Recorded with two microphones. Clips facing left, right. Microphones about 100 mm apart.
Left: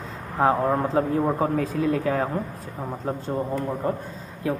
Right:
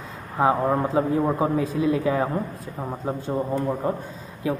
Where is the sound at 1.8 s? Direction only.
50° left (ahead or behind).